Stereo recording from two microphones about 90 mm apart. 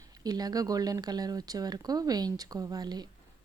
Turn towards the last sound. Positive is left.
turn(degrees=-50)  # may be behind; listen again after turning